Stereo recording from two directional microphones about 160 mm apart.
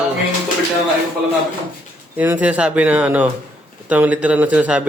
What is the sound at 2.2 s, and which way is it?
Speech, 10° right (ahead or behind).